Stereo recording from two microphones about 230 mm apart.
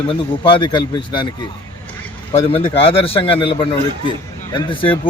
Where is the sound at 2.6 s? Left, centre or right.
Left.